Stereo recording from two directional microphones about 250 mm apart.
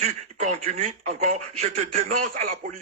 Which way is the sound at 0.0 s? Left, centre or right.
Right.